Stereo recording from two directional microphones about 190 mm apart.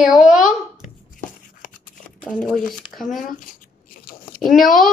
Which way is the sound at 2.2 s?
5° left (ahead or behind).